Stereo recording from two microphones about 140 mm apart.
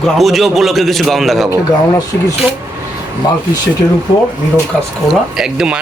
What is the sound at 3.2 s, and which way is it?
Speech, 25° left (ahead or behind).